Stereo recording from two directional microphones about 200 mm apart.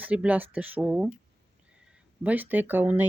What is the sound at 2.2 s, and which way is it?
Speech, 10° right (ahead or behind).